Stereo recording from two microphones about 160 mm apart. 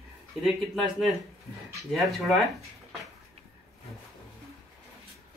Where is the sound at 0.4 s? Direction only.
Centre (ahead or behind).